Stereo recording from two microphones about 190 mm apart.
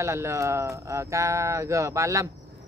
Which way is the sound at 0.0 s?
15° right (ahead or behind).